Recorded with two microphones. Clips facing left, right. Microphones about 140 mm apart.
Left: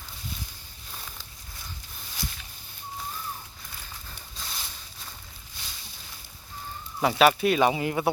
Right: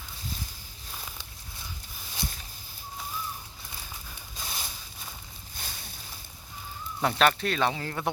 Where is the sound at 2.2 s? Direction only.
25° right (ahead or behind).